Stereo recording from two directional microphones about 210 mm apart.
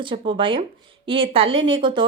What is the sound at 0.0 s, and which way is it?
A woman's voice, 25° right (ahead or behind).